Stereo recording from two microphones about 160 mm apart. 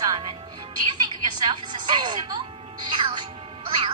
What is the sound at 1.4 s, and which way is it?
Music, 30° right (ahead or behind).